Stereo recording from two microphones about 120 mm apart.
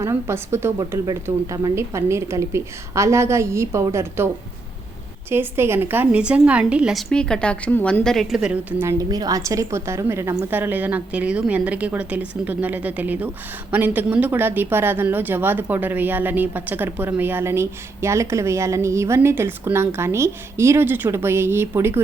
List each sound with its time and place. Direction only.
0.0 s speech: 20° right (ahead or behind)
5.3 s a woman's voice: 20° right (ahead or behind)
7.1 s a woman's voice: 5° left (ahead or behind)
8.0 s a woman's voice: centre (ahead or behind)
8.8 s a woman's voice: 25° right (ahead or behind)